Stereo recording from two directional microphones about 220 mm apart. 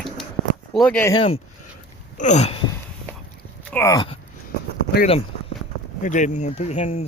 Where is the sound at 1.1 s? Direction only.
25° left (ahead or behind).